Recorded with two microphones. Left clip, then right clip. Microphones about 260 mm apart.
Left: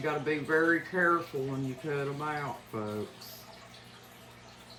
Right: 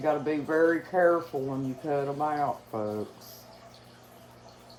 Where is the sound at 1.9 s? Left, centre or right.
Right.